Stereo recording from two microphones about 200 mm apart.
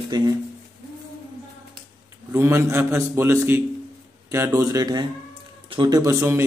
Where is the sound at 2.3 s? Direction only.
15° right (ahead or behind).